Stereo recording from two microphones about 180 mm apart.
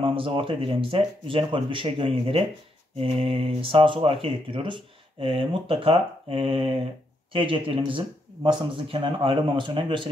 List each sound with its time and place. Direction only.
0.0 s speech: 30° right (ahead or behind)